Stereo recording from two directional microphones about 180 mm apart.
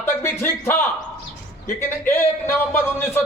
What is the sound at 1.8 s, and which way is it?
A man's voice, 10° left (ahead or behind).